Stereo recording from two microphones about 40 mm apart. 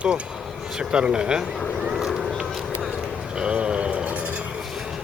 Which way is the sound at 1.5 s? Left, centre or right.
Centre.